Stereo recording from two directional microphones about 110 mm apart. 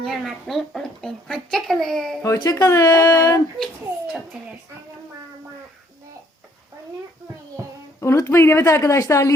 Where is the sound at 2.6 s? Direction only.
30° left (ahead or behind).